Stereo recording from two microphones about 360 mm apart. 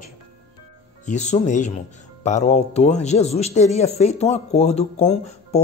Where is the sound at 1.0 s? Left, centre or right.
Centre.